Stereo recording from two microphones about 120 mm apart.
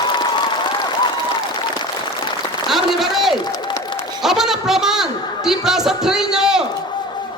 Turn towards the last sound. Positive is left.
turn(degrees=-5)  # may be behind; listen again after turning